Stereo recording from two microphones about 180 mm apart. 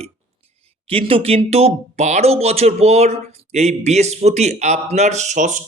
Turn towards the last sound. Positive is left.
turn(degrees=-45)  # may be behind; listen again after turning